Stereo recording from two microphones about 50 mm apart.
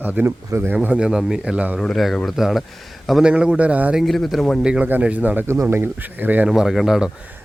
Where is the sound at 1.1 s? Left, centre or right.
Centre.